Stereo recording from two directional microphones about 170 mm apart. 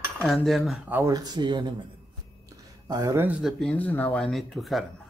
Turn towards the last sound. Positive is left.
turn(degrees=0)  # may be behind; listen again after turning